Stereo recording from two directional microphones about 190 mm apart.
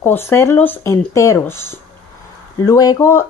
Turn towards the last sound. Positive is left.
turn(degrees=15)  # may be behind; listen again after turning